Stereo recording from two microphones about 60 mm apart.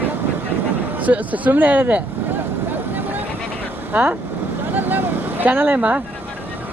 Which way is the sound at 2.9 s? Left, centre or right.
Right.